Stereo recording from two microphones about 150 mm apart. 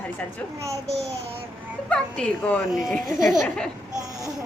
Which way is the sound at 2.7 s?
Centre (ahead or behind).